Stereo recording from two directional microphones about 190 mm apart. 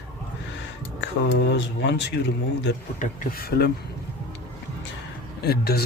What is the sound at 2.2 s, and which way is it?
Speech, 60° left (ahead or behind).